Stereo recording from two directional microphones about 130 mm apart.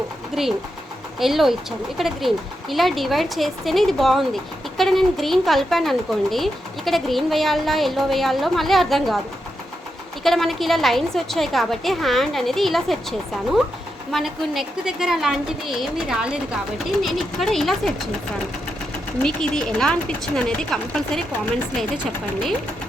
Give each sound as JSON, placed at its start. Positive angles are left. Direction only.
{"t": 0.3, "sound": "speech", "side_deg": -5}
{"t": 10.2, "sound": "speech", "side_deg": 0}
{"t": 19.2, "sound": "speech", "side_deg": 5}